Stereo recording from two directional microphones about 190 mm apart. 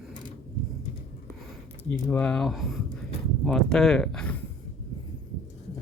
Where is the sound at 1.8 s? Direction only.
10° left (ahead or behind).